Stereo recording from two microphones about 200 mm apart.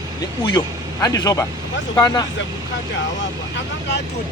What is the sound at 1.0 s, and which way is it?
A man's voice, 20° left (ahead or behind).